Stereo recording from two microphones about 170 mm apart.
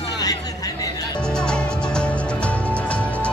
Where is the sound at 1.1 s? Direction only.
5° left (ahead or behind).